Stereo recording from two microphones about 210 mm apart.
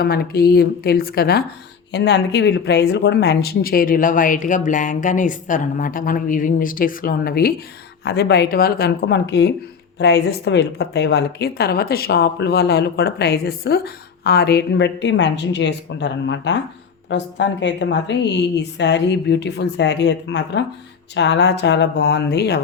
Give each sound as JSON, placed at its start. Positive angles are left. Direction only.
{"t": 0.0, "sound": "a woman's voice", "side_deg": 45}